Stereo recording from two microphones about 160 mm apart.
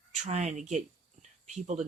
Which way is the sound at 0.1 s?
45° right (ahead or behind).